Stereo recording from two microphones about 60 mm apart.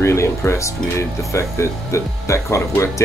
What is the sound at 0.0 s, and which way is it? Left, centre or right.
Music, left.